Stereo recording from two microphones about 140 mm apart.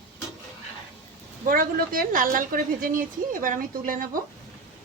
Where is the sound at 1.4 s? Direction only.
85° right.